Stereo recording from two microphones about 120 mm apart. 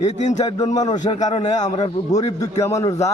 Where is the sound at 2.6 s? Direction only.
25° left (ahead or behind).